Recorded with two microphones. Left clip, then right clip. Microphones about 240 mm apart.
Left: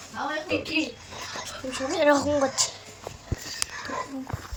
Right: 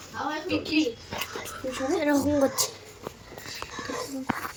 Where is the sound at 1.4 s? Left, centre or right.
Centre.